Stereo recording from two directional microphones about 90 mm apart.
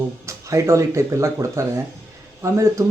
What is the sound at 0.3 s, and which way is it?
Speech, 35° right (ahead or behind).